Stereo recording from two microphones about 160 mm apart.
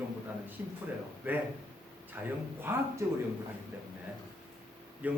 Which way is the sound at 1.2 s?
10° right (ahead or behind).